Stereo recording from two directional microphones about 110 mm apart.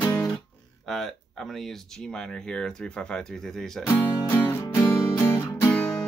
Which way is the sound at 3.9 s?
20° left (ahead or behind).